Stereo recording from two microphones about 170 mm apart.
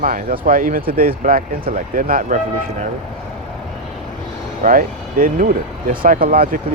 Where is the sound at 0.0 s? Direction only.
55° right (ahead or behind).